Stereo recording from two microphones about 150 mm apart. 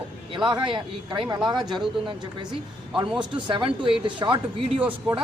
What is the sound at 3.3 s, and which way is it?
Speech, 35° right (ahead or behind).